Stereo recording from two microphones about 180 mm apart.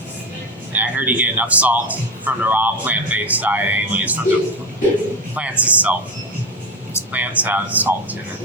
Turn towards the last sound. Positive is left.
turn(degrees=-10)  # may be behind; listen again after turning